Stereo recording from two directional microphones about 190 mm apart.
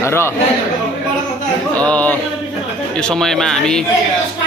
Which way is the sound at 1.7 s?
5° left (ahead or behind).